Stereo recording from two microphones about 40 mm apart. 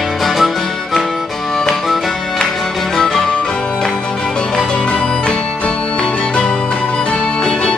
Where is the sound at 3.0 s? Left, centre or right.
Centre.